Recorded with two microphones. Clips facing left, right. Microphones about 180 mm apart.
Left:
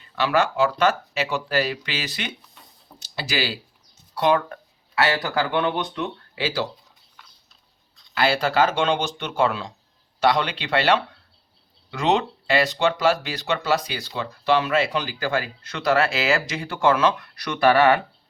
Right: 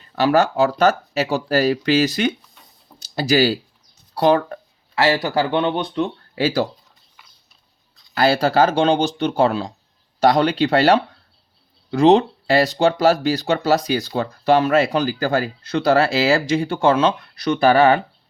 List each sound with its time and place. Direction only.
0.0 s speech: 40° right (ahead or behind)
6.3 s speech: 45° right (ahead or behind)
7.2 s a sound: 10° right (ahead or behind)
8.1 s speech: 40° right (ahead or behind)